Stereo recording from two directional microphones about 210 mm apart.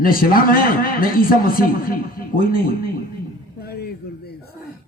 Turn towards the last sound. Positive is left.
turn(degrees=50)  # may be behind; listen again after turning